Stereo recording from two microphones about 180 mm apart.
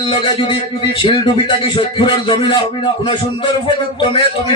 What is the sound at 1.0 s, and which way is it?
A man's voice, 30° left (ahead or behind).